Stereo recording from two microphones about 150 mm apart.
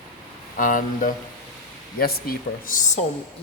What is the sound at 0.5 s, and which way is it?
Speech, 65° left (ahead or behind).